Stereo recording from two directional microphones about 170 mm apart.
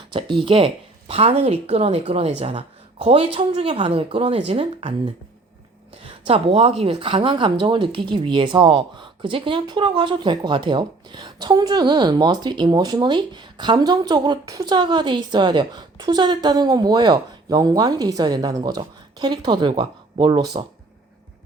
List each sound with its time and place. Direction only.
0.1 s speech: 30° right (ahead or behind)
6.0 s speech: 35° right (ahead or behind)